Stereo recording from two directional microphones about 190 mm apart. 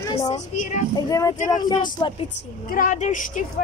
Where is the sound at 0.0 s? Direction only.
20° left (ahead or behind).